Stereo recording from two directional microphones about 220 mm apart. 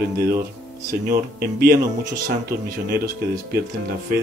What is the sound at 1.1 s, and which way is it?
Speech, 45° right (ahead or behind).